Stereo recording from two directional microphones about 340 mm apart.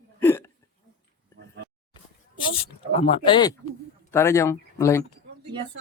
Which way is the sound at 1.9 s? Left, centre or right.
Centre.